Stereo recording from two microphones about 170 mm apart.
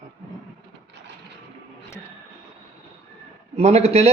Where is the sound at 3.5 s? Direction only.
40° right (ahead or behind).